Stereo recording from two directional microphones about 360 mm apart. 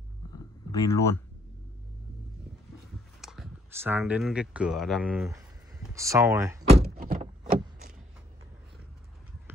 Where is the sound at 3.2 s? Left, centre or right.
Centre.